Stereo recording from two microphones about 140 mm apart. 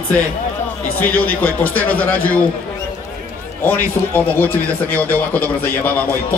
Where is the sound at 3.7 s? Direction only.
15° left (ahead or behind).